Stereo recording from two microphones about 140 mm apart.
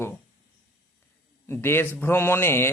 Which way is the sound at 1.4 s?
15° left (ahead or behind).